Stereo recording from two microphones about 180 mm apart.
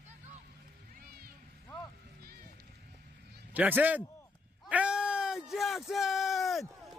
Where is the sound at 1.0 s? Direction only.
55° right (ahead or behind).